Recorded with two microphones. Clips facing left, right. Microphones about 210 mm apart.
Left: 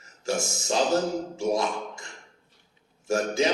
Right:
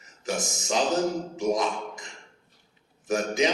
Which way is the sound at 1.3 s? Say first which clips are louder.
Even; 20° right (ahead or behind).